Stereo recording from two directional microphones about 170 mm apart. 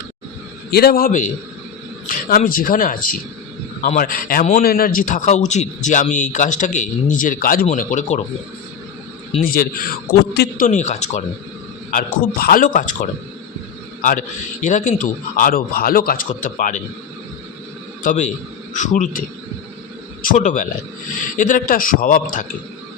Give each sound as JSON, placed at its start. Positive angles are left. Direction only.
{"t": 0.7, "sound": "a man's voice", "side_deg": 65}
{"t": 9.4, "sound": "a man's voice", "side_deg": 60}
{"t": 10.7, "sound": "a man's voice", "side_deg": 45}
{"t": 11.9, "sound": "a man's voice", "side_deg": 55}
{"t": 18.0, "sound": "a man's voice", "side_deg": 50}
{"t": 20.2, "sound": "a man's voice", "side_deg": 45}